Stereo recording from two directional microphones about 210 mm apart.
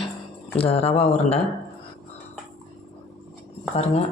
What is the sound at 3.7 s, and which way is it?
Speech, 30° left (ahead or behind).